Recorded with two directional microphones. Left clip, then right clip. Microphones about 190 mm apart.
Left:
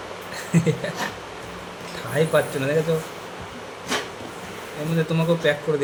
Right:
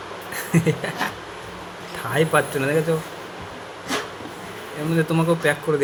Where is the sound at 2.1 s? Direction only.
25° right (ahead or behind).